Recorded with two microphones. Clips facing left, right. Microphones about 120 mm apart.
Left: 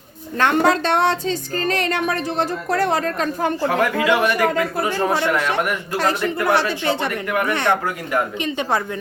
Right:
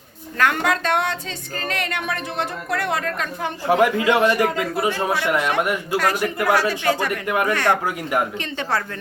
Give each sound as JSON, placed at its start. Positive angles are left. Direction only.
{"t": 0.3, "sound": "speech", "side_deg": 30}
{"t": 3.7, "sound": "speech", "side_deg": -20}
{"t": 6.0, "sound": "a woman's voice", "side_deg": 25}
{"t": 7.3, "sound": "speech", "side_deg": -20}
{"t": 7.5, "sound": "a woman's voice", "side_deg": 20}